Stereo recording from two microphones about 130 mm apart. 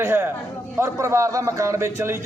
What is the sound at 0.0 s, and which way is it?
A man's voice, 20° right (ahead or behind).